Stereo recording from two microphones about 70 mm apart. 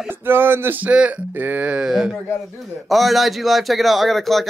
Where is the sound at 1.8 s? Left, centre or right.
Centre.